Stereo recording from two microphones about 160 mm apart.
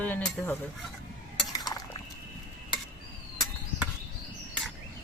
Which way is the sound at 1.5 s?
25° left (ahead or behind).